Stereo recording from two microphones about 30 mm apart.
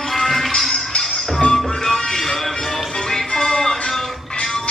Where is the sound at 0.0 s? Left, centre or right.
Centre.